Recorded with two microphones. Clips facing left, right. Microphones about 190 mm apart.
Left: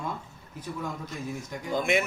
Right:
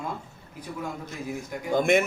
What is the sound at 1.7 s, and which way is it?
Speech, 50° right (ahead or behind).